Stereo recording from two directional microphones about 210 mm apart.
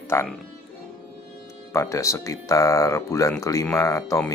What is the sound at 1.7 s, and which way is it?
Speech, 15° left (ahead or behind).